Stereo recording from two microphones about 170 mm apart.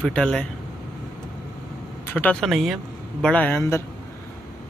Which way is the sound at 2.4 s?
Centre (ahead or behind).